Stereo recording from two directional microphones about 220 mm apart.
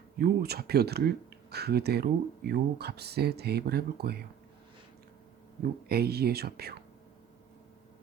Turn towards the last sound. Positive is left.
turn(degrees=-45)  # may be behind; listen again after turning